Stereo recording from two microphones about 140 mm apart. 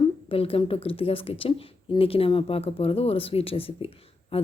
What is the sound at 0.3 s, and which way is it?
Speech, 40° left (ahead or behind).